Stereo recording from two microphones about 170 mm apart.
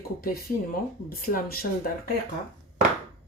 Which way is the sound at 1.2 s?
60° left (ahead or behind).